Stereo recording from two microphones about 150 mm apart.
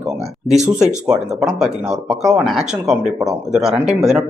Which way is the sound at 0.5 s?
50° right (ahead or behind).